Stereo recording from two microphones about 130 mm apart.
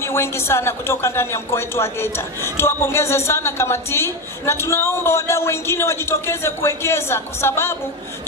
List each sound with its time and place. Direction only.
0.0 s a woman's voice: 20° left (ahead or behind)